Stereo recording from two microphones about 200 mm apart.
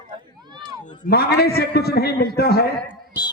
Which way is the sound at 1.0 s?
50° left (ahead or behind).